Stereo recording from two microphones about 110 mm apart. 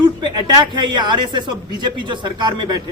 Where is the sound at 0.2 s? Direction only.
45° right (ahead or behind).